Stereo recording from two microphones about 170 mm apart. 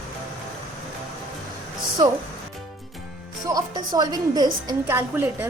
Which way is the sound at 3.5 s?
20° right (ahead or behind).